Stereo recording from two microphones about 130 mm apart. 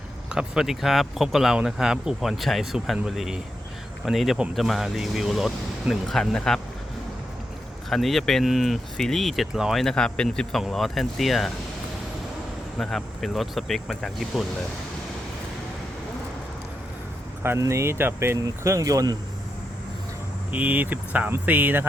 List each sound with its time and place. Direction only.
0.3 s speech: 5° right (ahead or behind)
7.9 s speech: centre (ahead or behind)
12.8 s speech: centre (ahead or behind)
17.4 s speech: 20° right (ahead or behind)
20.5 s speech: 10° right (ahead or behind)